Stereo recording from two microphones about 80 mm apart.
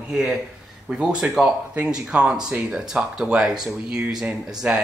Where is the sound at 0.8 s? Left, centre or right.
Centre.